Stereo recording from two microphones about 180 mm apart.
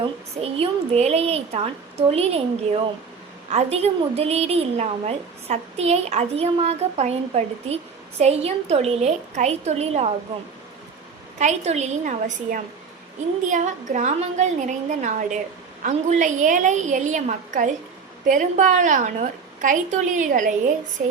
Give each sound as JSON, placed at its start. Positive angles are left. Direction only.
{"t": 0.0, "sound": "a woman's voice", "side_deg": -30}
{"t": 3.5, "sound": "a woman's voice", "side_deg": -35}
{"t": 11.3, "sound": "a woman's voice", "side_deg": -40}